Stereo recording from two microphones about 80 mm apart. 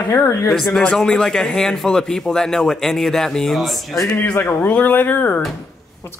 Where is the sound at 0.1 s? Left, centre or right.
Left.